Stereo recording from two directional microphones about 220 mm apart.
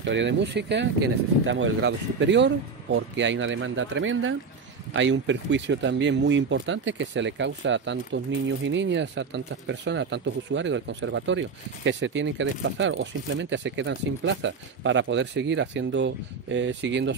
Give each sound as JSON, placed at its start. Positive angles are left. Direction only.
{"t": 0.0, "sound": "speech", "side_deg": -55}